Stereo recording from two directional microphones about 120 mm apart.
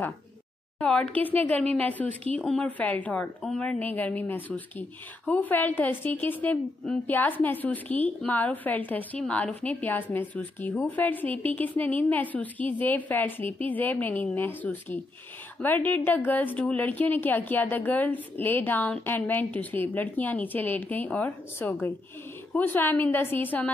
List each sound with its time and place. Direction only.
0.7 s a woman's voice: 10° left (ahead or behind)